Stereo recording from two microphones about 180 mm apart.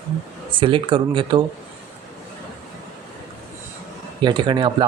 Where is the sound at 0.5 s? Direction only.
30° right (ahead or behind).